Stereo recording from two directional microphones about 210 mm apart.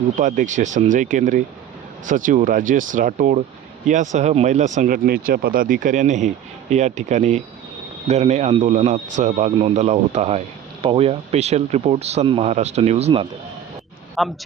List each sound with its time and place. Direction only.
0.2 s speech: 40° right (ahead or behind)
14.2 s speech: centre (ahead or behind)